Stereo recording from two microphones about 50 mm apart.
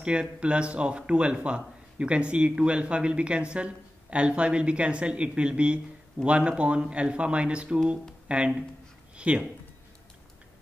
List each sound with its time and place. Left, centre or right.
0.0 s speech: right